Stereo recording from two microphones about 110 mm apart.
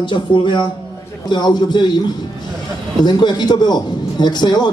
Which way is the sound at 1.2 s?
40° left (ahead or behind).